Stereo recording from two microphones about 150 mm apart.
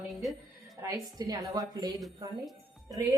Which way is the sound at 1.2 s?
25° right (ahead or behind).